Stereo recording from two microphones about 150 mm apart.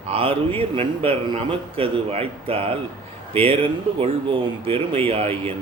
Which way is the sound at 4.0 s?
40° right (ahead or behind).